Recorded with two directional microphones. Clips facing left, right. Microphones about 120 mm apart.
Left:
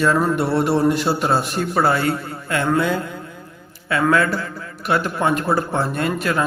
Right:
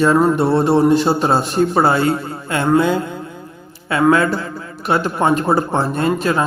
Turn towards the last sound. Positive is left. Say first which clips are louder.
# right 4 dB
turn(degrees=-30)  # may be behind; listen again after turning